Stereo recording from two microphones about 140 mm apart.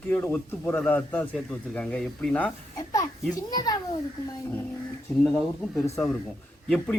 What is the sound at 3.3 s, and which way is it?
Speech, 25° left (ahead or behind).